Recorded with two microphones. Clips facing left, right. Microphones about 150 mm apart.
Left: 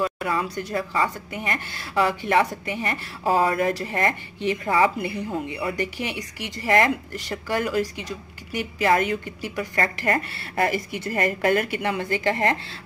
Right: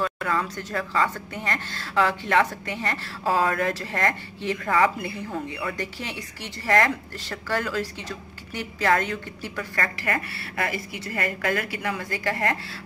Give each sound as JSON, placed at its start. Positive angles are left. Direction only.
{"t": 0.0, "sound": "speech", "side_deg": 15}
{"t": 9.8, "sound": "a woman's voice", "side_deg": 30}